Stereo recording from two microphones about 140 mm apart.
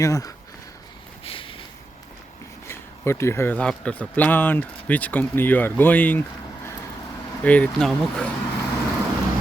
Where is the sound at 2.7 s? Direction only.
20° left (ahead or behind).